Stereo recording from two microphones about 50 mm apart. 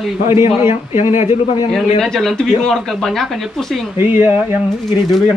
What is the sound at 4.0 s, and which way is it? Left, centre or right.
Speech, right.